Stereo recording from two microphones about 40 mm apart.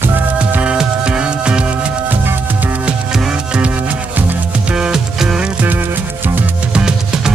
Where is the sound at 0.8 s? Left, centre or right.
Right.